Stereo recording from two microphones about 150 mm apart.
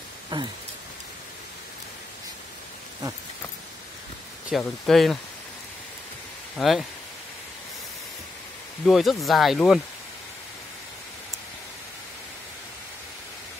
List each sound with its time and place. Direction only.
0.3 s rain: 30° right (ahead or behind)
4.5 s speech: centre (ahead or behind)
6.5 s speech: centre (ahead or behind)
8.8 s speech: centre (ahead or behind)